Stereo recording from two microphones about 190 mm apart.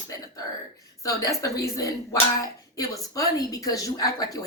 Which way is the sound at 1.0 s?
15° left (ahead or behind).